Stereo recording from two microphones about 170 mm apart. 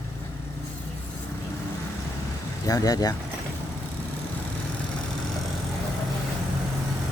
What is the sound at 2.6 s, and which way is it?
Speech, 20° left (ahead or behind).